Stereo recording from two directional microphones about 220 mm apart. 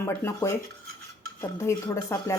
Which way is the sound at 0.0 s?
10° left (ahead or behind).